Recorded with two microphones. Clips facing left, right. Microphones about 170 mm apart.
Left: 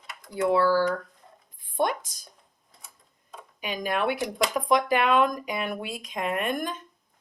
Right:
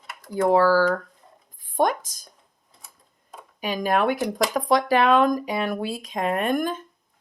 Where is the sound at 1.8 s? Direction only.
40° right (ahead or behind).